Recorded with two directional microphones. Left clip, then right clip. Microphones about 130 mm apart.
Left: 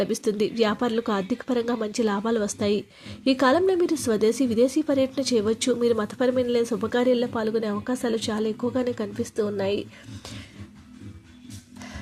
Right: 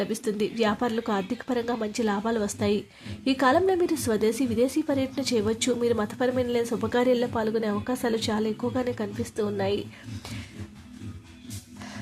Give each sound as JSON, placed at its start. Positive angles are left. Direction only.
{"t": 0.0, "sound": "speech", "side_deg": 35}